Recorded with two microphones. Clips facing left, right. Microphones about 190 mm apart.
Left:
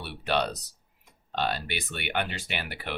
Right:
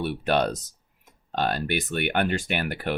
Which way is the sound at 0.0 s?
50° right (ahead or behind).